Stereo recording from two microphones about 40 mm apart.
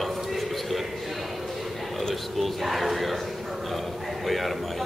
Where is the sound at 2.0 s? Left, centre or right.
Centre.